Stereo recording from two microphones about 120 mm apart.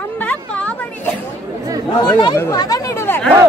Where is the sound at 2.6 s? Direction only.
30° left (ahead or behind).